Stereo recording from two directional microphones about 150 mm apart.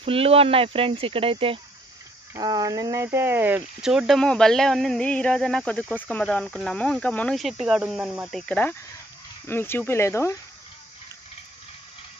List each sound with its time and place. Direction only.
0.0 s speech: 40° right (ahead or behind)
2.3 s speech: 25° right (ahead or behind); by 10.3 s 20° left (ahead or behind)